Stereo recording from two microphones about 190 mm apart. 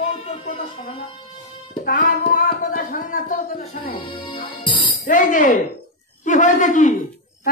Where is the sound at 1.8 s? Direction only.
50° left (ahead or behind).